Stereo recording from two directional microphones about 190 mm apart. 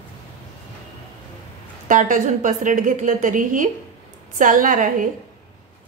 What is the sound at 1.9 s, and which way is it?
A woman's voice, 45° right (ahead or behind).